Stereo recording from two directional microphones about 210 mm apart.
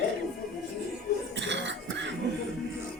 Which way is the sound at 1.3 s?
60° right (ahead or behind).